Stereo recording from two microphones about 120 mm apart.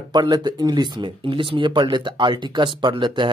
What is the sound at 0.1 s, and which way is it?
Speech, 40° right (ahead or behind).